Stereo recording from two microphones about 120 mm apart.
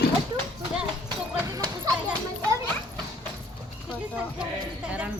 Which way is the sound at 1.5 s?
30° right (ahead or behind).